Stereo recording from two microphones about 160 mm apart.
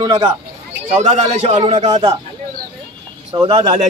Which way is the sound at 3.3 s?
30° right (ahead or behind).